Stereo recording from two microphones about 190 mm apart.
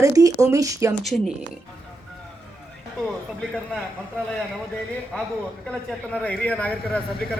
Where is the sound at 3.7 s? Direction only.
5° left (ahead or behind).